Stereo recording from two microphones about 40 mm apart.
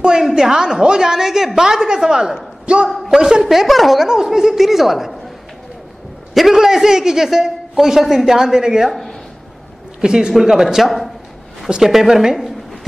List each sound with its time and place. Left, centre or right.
0.0 s a woman's voice: centre
2.9 s a man's voice: centre
3.4 s a woman's voice: centre
4.1 s a woman's voice: centre
6.3 s a woman's voice: centre
9.9 s a man's voice: centre